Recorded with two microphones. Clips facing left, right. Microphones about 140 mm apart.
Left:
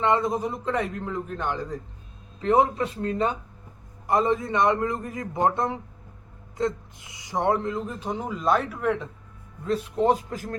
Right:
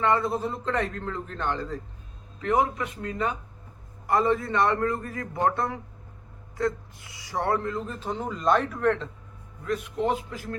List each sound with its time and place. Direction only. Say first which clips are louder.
0.0 s speech: left 1 dB; 20° left (ahead or behind)
2.4 s a man's voice: left 4 dB; 30° left (ahead or behind); by 9.0 s 10° left (ahead or behind)
9.6 s a man's voice: left 4 dB; 35° left (ahead or behind)